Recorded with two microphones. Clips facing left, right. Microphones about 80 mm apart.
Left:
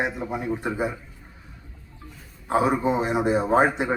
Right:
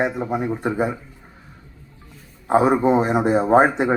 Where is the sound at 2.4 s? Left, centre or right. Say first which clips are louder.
Right 5 dB; right.